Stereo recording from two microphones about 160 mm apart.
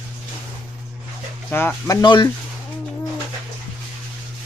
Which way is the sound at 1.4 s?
15° left (ahead or behind).